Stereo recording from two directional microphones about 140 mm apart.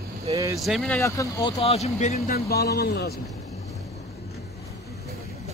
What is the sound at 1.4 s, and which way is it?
Speech, 45° left (ahead or behind).